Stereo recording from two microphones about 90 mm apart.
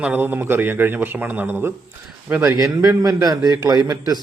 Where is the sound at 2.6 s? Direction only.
35° right (ahead or behind).